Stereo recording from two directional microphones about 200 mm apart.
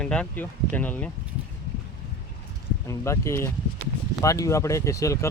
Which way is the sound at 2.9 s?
15° left (ahead or behind).